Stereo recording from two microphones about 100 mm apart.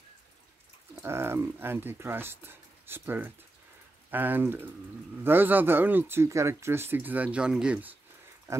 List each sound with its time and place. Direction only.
1.0 s speech: 25° right (ahead or behind)